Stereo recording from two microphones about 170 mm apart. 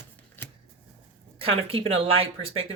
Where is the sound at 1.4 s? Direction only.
35° right (ahead or behind).